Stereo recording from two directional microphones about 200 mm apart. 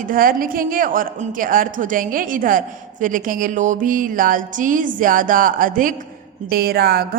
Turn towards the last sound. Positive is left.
turn(degrees=-50)  # may be behind; listen again after turning